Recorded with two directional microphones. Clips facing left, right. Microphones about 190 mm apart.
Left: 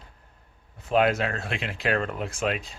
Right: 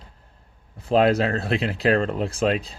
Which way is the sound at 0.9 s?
35° right (ahead or behind).